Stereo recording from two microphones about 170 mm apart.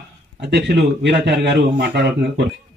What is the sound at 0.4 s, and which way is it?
A man's voice, 75° right (ahead or behind).